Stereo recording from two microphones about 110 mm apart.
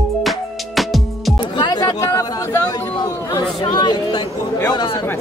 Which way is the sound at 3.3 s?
40° left (ahead or behind).